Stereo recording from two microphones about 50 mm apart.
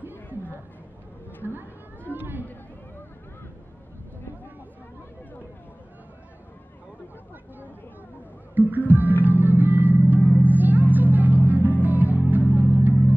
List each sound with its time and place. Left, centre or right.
1.4 s a sound: right
2.1 s chatter: right
8.5 s music: right